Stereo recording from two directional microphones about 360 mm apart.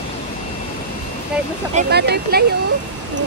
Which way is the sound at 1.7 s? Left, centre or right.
Right.